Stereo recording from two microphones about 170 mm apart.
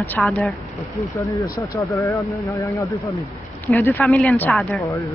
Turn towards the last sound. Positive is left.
turn(degrees=10)  # may be behind; listen again after turning